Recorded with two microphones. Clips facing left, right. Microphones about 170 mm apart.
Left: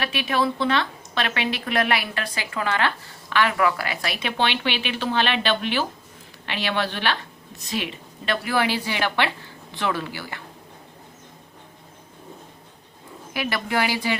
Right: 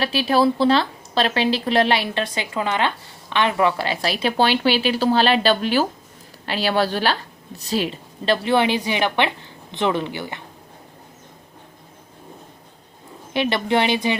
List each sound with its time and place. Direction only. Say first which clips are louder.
0.0 s a woman's voice: right 6 dB; 35° right (ahead or behind)
13.3 s a woman's voice: right 6 dB; 25° right (ahead or behind)